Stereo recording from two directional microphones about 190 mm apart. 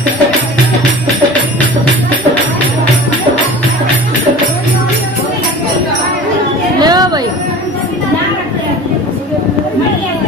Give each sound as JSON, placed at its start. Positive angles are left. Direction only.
{"t": 6.8, "sound": "music", "side_deg": -20}